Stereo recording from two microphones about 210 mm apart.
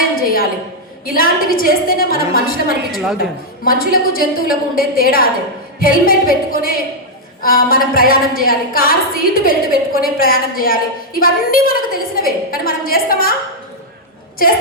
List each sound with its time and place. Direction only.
1.0 s a woman's voice: 45° left (ahead or behind)